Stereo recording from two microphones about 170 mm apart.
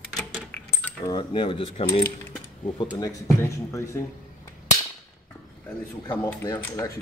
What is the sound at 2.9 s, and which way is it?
Speech, 20° left (ahead or behind).